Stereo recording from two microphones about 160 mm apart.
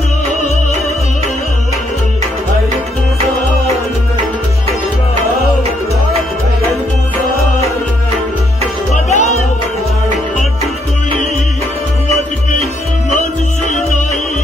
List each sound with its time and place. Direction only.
8.9 s music: 50° left (ahead or behind)